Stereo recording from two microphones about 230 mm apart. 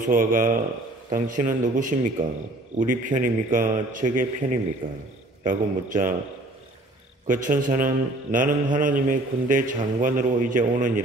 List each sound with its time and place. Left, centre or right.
0.0 s a man's voice: right
4.8 s a man's voice: right
5.4 s a man's voice: right
7.2 s a man's voice: right